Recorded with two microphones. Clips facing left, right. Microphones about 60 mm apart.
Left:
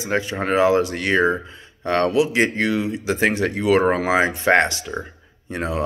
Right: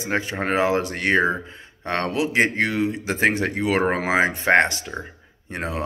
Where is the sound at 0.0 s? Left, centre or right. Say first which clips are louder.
Left 2 dB; right.